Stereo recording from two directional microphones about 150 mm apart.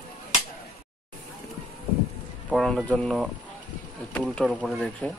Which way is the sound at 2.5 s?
5° left (ahead or behind).